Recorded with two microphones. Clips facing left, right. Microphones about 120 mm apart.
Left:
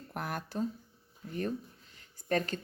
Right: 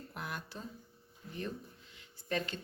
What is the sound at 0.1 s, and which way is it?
Speech, 50° left (ahead or behind).